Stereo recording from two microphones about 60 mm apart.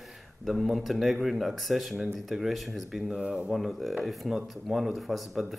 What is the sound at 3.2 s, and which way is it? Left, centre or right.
Speech, centre.